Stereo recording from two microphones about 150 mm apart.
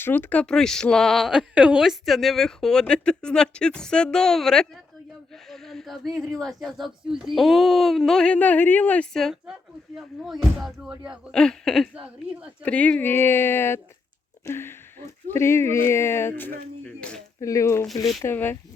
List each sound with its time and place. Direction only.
0.0 s speech: 10° left (ahead or behind)
17.4 s speech: 20° left (ahead or behind)